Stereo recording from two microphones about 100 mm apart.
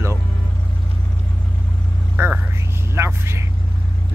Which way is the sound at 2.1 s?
15° right (ahead or behind).